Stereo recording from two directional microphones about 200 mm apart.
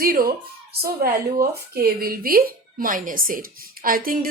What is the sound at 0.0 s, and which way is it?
A woman's voice, 45° right (ahead or behind).